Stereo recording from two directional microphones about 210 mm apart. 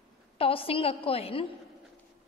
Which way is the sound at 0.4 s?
25° left (ahead or behind).